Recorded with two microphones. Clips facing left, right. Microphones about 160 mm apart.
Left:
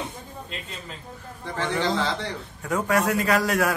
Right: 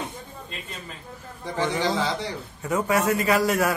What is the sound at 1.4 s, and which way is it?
A man's voice, 10° right (ahead or behind).